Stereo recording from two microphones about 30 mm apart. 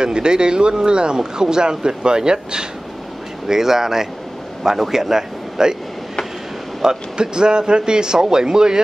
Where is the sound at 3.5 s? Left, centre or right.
Centre.